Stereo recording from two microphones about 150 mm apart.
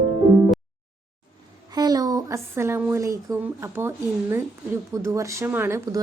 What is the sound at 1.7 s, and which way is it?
Speech, 25° right (ahead or behind).